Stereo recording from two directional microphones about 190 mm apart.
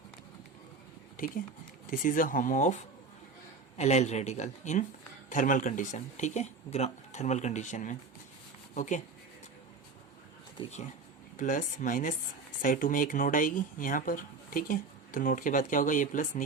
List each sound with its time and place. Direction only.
1.9 s speech: 45° left (ahead or behind)
11.3 s speech: 45° left (ahead or behind)